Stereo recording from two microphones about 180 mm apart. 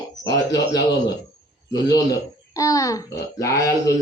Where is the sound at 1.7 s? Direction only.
20° left (ahead or behind).